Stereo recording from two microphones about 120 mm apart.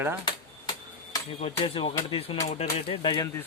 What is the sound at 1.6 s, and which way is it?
Speech, 45° left (ahead or behind).